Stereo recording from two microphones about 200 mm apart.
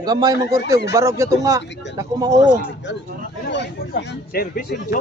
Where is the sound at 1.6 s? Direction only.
60° left (ahead or behind).